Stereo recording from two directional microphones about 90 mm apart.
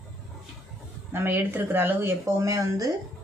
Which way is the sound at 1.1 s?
25° right (ahead or behind).